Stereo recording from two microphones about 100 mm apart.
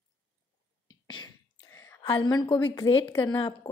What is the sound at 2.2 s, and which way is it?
A woman's voice, 45° left (ahead or behind).